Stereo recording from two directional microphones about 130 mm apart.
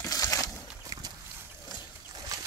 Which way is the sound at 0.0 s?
25° left (ahead or behind).